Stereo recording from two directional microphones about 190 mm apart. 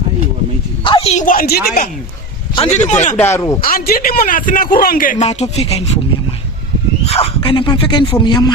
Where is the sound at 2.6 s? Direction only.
35° left (ahead or behind).